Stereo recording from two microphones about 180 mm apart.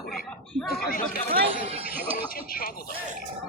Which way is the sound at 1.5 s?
35° right (ahead or behind).